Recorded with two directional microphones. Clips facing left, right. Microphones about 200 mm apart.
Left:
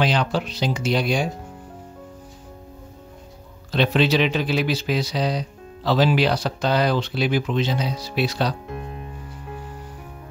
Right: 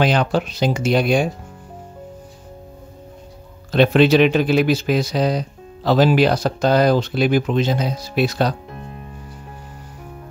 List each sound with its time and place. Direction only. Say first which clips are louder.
0.0 s speech: right 4 dB; 50° right (ahead or behind)
3.7 s speech: right 6 dB; 50° right (ahead or behind)